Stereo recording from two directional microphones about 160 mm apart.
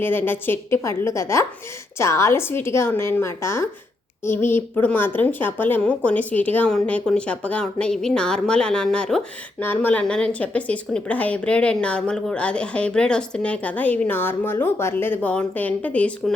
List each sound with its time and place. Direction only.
0.0 s a woman's voice: 15° left (ahead or behind)